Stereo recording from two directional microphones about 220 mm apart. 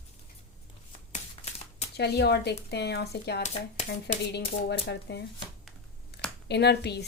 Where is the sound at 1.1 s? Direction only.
30° left (ahead or behind).